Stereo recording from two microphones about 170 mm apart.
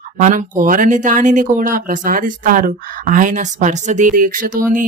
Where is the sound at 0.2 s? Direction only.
50° right (ahead or behind).